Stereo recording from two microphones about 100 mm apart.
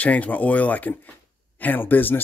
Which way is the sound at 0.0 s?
15° left (ahead or behind).